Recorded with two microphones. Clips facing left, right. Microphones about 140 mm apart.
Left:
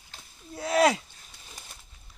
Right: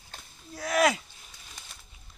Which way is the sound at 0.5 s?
25° left (ahead or behind).